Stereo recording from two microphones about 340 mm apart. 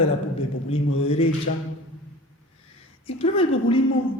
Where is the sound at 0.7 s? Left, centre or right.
Centre.